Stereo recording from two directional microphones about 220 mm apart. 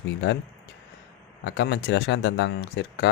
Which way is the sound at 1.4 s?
50° left (ahead or behind).